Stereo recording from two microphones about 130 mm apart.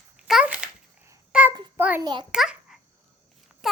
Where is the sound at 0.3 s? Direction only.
10° right (ahead or behind).